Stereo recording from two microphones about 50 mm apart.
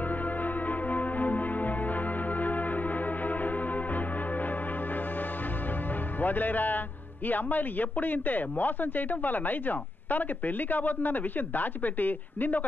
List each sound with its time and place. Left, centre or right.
0.4 s church bell: left
6.2 s speech: left